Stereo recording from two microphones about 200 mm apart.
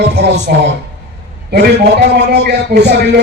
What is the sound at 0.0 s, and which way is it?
Speech, 55° right (ahead or behind).